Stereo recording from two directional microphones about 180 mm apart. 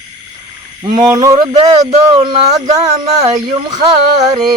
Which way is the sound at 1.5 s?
35° right (ahead or behind).